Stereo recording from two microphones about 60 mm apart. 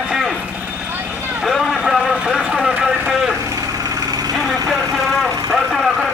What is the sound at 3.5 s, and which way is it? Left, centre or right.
Vehicle, right.